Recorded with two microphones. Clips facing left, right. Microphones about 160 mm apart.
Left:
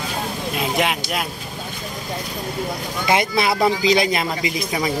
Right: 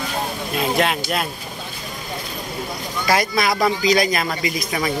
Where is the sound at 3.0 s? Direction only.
20° left (ahead or behind).